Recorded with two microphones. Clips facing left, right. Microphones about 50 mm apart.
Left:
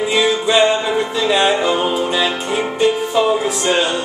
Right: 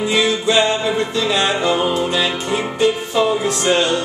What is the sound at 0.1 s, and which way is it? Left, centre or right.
Music, centre.